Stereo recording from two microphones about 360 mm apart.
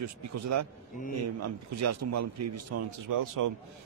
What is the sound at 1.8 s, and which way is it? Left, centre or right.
Speech, right.